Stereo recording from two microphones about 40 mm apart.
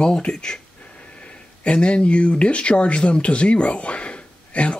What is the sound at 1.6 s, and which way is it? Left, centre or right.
Speech, left.